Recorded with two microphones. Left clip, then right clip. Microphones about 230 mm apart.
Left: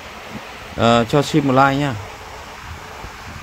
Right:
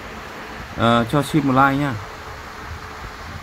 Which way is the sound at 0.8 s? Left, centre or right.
Centre.